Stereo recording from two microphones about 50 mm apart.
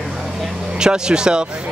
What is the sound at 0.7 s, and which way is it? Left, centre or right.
Speech, centre.